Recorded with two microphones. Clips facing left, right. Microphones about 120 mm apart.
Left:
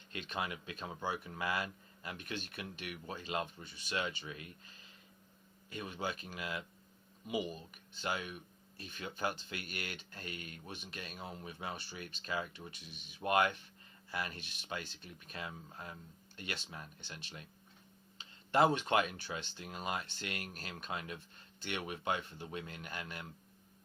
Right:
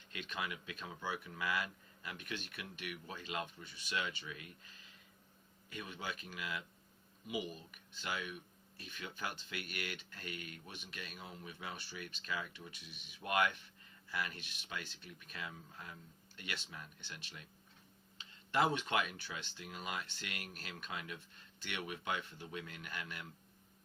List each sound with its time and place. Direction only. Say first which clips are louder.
0.1 s speech: left 3 dB; 35° left (ahead or behind)
5.7 s speech: left 5 dB; 35° left (ahead or behind)